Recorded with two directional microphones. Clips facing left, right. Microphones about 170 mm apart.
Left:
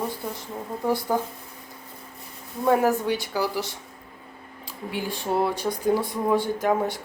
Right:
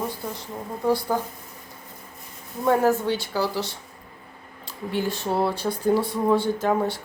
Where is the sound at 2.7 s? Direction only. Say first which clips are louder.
Right 1 dB; 15° left (ahead or behind).